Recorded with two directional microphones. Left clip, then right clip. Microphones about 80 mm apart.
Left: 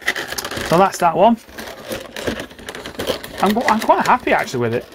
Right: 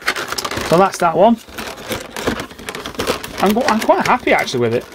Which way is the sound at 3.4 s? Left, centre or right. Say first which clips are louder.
Right 1 dB; right.